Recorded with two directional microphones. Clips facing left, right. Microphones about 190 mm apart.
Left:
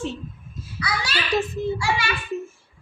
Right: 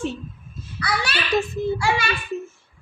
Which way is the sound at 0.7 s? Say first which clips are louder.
Right 2 dB; 60° right (ahead or behind).